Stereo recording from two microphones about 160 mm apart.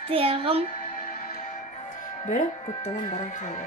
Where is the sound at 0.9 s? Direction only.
55° left (ahead or behind).